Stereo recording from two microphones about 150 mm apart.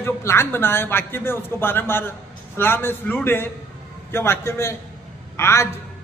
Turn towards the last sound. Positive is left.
turn(degrees=15)  # may be behind; listen again after turning